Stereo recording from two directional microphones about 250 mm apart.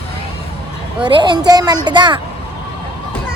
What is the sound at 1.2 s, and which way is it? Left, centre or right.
Speech, centre.